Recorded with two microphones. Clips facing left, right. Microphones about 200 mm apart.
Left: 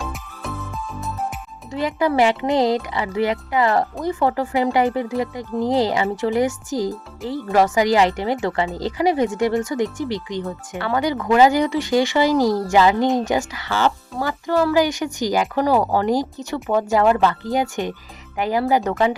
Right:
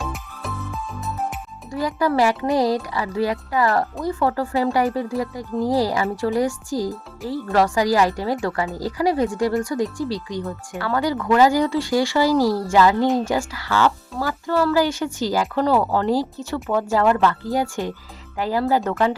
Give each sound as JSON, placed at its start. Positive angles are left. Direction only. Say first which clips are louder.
{"t": 0.0, "sound": "music", "louder": "even", "side_deg": 0}
{"t": 1.7, "sound": "speech", "louder": "left 1 dB", "side_deg": 20}